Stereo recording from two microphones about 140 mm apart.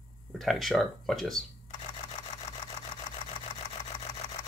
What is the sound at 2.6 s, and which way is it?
Engine, 40° left (ahead or behind).